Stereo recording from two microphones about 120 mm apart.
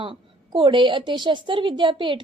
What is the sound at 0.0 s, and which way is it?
A woman's voice, 45° right (ahead or behind).